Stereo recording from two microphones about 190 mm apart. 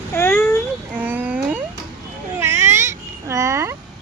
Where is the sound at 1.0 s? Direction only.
10° right (ahead or behind).